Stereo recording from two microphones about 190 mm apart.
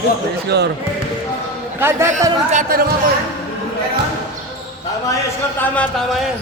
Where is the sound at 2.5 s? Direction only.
45° right (ahead or behind).